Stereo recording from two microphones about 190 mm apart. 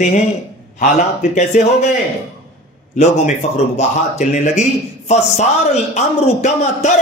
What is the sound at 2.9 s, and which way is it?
Speech, 40° left (ahead or behind).